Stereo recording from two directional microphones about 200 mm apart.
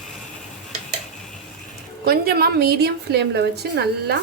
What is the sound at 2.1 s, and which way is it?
A woman's voice, 50° right (ahead or behind).